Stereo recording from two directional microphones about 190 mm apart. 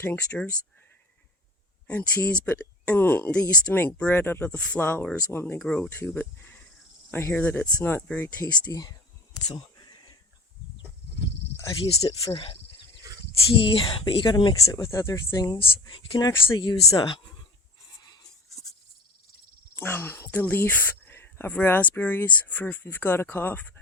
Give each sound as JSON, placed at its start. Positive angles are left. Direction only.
{"t": 0.0, "sound": "speech", "side_deg": 10}
{"t": 1.9, "sound": "speech", "side_deg": 5}
{"t": 11.5, "sound": "cricket", "side_deg": 20}
{"t": 12.3, "sound": "speech", "side_deg": 30}
{"t": 13.6, "sound": "speech", "side_deg": 25}
{"t": 19.7, "sound": "speech", "side_deg": 10}